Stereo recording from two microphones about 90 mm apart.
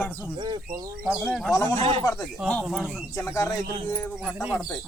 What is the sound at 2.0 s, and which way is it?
Speech, 35° left (ahead or behind).